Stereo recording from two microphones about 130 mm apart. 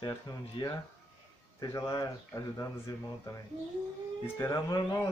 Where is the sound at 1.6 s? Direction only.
25° left (ahead or behind).